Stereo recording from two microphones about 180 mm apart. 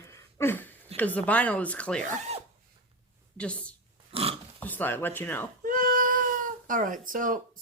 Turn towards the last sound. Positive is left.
turn(degrees=-50)  # may be behind; listen again after turning